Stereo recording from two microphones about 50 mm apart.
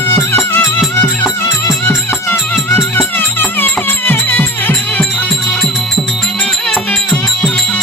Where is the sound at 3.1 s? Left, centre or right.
Left.